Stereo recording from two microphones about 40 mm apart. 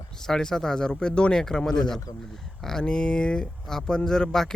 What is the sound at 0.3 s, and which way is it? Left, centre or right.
Speech, centre.